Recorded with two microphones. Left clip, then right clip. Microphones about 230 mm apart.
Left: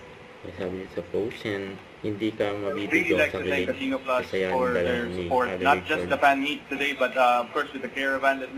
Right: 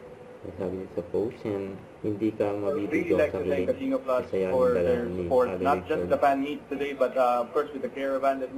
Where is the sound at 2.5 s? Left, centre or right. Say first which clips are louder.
Left 2 dB; centre.